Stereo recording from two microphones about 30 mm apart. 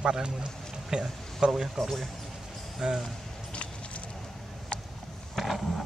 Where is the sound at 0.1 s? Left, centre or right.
Right.